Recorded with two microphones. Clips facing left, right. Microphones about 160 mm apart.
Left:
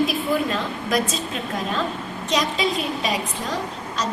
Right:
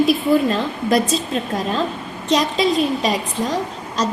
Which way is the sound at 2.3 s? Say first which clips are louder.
Right 5 dB; 35° right (ahead or behind).